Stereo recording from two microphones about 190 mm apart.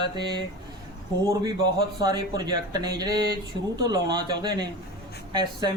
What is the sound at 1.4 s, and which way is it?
Speech, 20° right (ahead or behind).